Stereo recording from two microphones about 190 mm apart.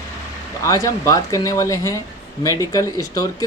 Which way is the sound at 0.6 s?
15° left (ahead or behind).